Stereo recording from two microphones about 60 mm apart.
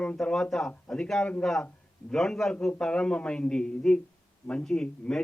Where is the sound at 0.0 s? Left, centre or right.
Centre.